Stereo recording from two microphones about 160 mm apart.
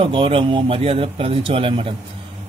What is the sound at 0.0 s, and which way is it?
Speech, 35° right (ahead or behind).